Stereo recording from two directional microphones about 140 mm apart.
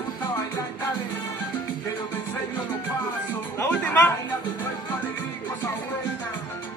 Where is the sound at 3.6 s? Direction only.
10° left (ahead or behind).